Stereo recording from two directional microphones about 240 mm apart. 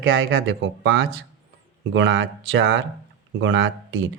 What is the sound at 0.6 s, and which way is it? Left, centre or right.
Speech, right.